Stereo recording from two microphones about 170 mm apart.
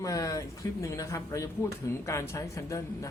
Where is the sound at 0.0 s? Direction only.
20° left (ahead or behind).